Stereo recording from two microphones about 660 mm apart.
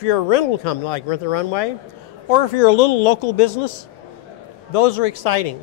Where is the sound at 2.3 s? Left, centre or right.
Left.